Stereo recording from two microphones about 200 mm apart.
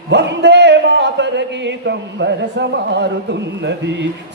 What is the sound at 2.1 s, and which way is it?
Speech, 60° right (ahead or behind).